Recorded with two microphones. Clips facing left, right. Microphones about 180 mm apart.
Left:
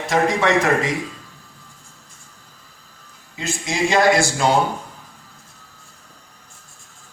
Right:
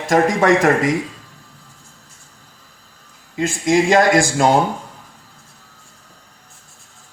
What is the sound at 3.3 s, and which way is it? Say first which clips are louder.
Speech: right 9 dB; 50° right (ahead or behind).